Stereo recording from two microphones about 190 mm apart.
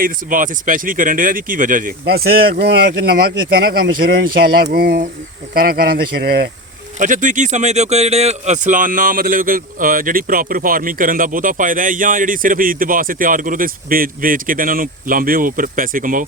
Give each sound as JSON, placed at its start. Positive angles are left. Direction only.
{"t": 0.0, "sound": "speech", "side_deg": -45}
{"t": 7.0, "sound": "speech", "side_deg": -40}